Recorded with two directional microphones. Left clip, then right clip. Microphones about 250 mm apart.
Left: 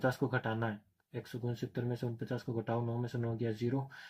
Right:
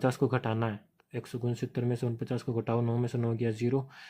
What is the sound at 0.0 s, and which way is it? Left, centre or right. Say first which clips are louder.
Speech: right 5 dB; right.